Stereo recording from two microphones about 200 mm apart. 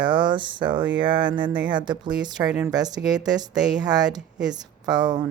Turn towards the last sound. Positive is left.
turn(degrees=-20)  # may be behind; listen again after turning